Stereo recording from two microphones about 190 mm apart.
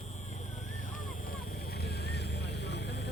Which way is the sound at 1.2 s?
55° left (ahead or behind).